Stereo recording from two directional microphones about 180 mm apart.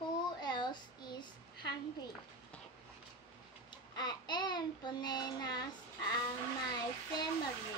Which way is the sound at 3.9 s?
25° left (ahead or behind).